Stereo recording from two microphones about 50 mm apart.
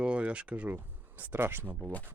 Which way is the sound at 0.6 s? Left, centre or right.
Right.